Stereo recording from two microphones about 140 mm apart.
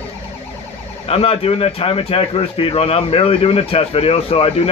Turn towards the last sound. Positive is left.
turn(degrees=45)  # may be behind; listen again after turning